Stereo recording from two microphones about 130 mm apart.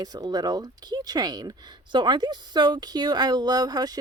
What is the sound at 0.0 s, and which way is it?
A woman's voice, 30° right (ahead or behind).